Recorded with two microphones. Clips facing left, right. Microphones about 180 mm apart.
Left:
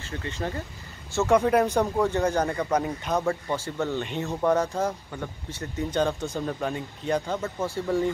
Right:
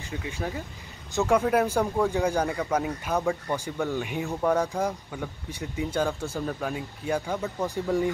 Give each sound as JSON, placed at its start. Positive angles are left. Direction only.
{"t": 0.0, "sound": "speech", "side_deg": -10}
{"t": 7.5, "sound": "speech", "side_deg": -15}